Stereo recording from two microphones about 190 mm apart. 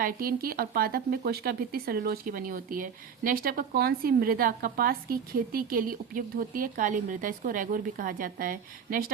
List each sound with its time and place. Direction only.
0.0 s speech: 50° right (ahead or behind)